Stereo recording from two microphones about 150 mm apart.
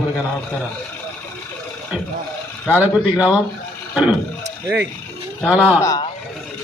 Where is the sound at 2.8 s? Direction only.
10° right (ahead or behind).